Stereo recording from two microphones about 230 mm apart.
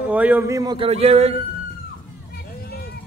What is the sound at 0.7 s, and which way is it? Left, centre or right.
Speech, right.